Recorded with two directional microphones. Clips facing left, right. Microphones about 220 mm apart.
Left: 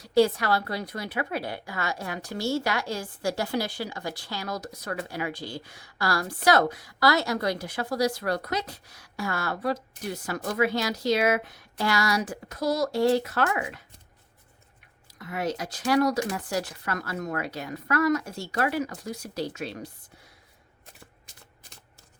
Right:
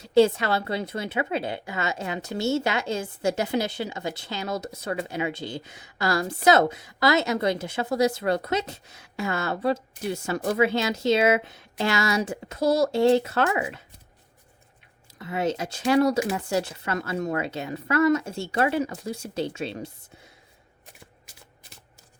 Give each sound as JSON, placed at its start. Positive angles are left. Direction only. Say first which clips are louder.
{"t": 0.0, "sound": "a woman's voice", "louder": "right 3 dB", "side_deg": -25}
{"t": 15.0, "sound": "a woman's voice", "louder": "right 4 dB", "side_deg": -25}